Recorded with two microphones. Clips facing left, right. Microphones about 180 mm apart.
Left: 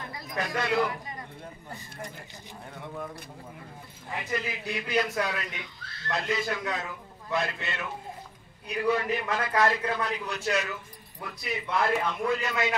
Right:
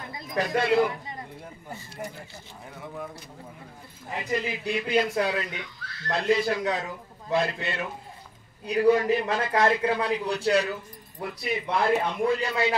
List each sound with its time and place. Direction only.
0.1 s speech: 25° right (ahead or behind)
2.7 s a man's voice: centre (ahead or behind)
4.3 s a man's voice: 25° right (ahead or behind)